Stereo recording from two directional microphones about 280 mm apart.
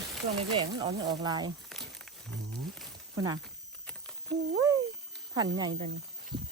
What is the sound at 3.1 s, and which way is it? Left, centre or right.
Speech, centre.